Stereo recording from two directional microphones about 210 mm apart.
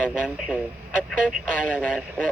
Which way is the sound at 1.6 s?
5° left (ahead or behind).